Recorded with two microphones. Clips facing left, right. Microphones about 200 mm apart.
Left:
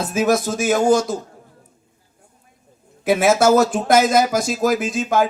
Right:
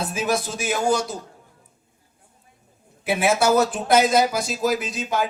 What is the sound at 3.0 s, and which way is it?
A man's voice, 40° left (ahead or behind).